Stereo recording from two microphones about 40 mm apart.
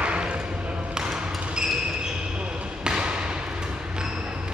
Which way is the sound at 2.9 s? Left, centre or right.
Right.